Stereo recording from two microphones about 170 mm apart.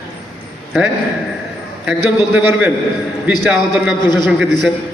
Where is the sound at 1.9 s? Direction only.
10° right (ahead or behind).